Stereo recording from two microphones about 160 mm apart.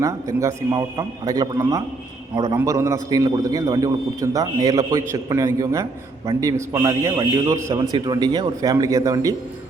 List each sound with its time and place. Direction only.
0.0 s a man's voice: 20° right (ahead or behind)